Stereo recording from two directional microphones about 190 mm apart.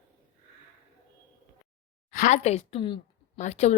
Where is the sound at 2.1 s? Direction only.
40° left (ahead or behind).